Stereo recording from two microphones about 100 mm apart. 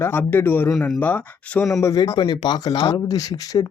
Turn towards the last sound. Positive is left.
turn(degrees=40)  # may be behind; listen again after turning